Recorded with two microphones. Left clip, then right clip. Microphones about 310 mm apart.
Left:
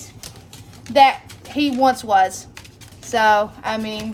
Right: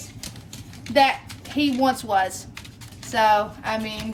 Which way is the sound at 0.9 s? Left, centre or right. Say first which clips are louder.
Left 5 dB; centre.